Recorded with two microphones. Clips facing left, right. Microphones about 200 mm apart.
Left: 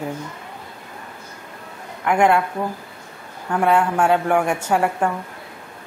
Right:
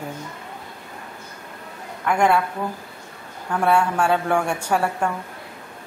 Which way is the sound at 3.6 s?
15° left (ahead or behind).